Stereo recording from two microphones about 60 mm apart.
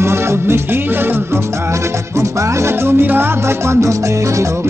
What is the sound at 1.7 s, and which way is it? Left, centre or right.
Music, right.